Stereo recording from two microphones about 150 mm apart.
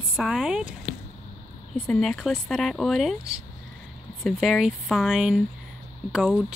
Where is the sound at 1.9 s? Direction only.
Centre (ahead or behind).